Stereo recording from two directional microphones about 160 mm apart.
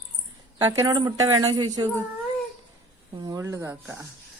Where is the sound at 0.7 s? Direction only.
20° right (ahead or behind).